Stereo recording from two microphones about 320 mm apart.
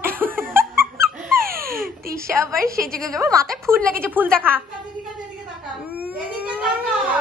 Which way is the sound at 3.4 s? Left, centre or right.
Centre.